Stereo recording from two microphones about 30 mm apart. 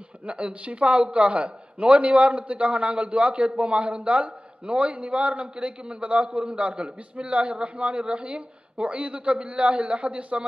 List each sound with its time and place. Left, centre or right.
0.2 s a man's voice: right